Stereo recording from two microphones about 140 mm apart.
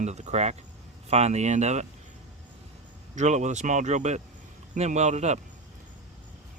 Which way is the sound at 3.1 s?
60° right (ahead or behind).